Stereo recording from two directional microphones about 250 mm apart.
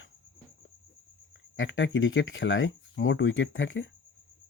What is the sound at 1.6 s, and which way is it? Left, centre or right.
Speech, left.